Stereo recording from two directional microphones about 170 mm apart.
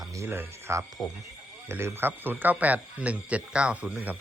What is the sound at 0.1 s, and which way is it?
Speech, 15° right (ahead or behind).